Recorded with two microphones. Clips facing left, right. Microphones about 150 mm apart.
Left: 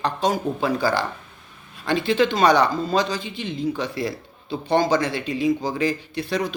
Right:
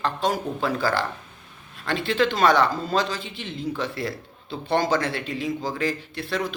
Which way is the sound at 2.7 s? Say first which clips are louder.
Left 3 dB; 5° right (ahead or behind).